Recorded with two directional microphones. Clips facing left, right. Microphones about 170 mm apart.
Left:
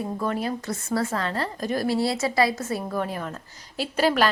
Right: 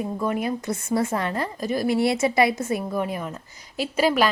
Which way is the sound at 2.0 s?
20° right (ahead or behind).